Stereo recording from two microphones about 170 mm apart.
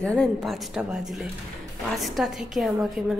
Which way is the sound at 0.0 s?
5° left (ahead or behind).